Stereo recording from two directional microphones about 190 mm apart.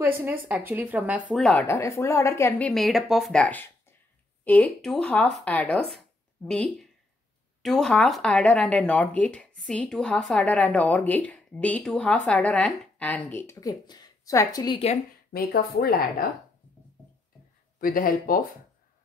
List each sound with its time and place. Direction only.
0.0 s a woman's voice: 10° right (ahead or behind); by 2.7 s 15° left (ahead or behind)
2.7 s a woman's voice: centre (ahead or behind); by 14.8 s 20° left (ahead or behind)
15.3 s speech: 55° left (ahead or behind)
17.7 s speech: 50° left (ahead or behind)